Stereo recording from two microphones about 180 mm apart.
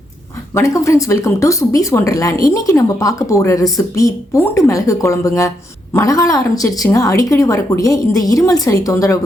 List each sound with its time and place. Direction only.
0.5 s a woman's voice: 15° left (ahead or behind)